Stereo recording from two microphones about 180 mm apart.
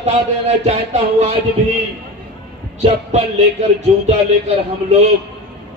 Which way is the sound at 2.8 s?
35° right (ahead or behind).